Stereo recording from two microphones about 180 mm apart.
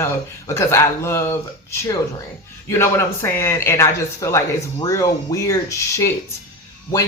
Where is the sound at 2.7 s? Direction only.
15° left (ahead or behind).